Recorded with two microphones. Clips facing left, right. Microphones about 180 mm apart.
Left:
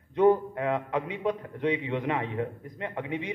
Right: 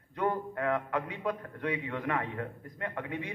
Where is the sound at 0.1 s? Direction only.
20° left (ahead or behind).